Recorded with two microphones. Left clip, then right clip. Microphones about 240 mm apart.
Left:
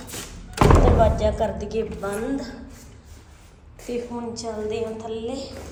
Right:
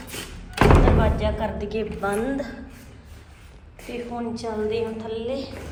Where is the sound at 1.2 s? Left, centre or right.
Left.